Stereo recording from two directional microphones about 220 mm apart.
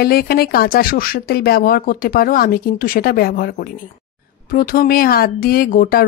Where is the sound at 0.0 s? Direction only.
45° left (ahead or behind).